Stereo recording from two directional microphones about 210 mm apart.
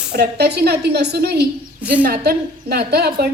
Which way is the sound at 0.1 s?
50° right (ahead or behind).